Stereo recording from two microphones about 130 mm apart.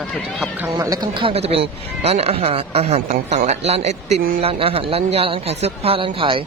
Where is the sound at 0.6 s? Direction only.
25° right (ahead or behind).